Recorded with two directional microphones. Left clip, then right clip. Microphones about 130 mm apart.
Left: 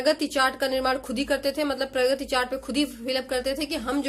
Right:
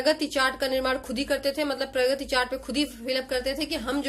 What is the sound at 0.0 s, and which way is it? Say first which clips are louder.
Speech: left 1 dB; 30° left (ahead or behind).